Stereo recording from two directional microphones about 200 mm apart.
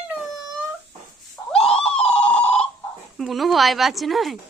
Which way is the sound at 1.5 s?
5° left (ahead or behind).